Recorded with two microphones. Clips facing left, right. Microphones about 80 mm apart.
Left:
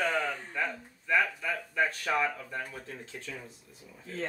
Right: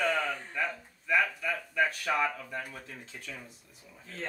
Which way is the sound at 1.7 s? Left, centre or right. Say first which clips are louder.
Even; left.